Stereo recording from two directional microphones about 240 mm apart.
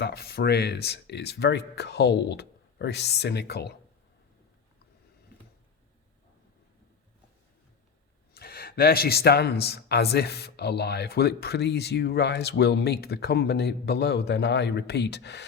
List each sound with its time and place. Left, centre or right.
0.0 s speech: left
8.3 s speech: left